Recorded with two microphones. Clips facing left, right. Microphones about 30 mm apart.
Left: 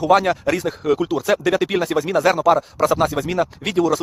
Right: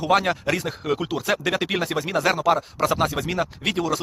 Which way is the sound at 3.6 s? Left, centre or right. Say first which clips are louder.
Left 6 dB; right.